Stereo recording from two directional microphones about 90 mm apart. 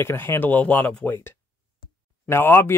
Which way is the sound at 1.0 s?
25° left (ahead or behind).